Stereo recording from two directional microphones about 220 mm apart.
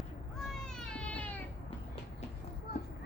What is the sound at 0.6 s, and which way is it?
Cat, 5° left (ahead or behind).